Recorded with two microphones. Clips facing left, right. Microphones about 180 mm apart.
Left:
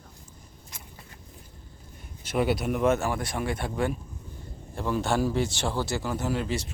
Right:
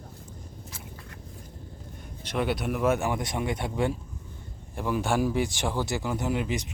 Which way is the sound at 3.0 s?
20° right (ahead or behind).